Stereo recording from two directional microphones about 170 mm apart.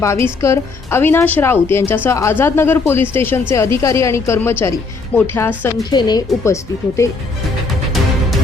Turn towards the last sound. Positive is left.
turn(degrees=15)  # may be behind; listen again after turning